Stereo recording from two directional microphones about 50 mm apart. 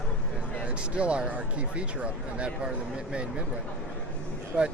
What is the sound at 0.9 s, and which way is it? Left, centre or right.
Speech, right.